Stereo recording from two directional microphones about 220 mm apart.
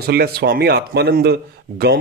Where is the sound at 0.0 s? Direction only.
45° right (ahead or behind).